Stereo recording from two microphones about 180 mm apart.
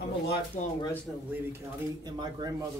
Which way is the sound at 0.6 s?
40° left (ahead or behind).